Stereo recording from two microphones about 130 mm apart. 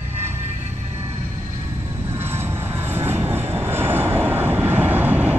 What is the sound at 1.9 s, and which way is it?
Vehicle, 20° right (ahead or behind).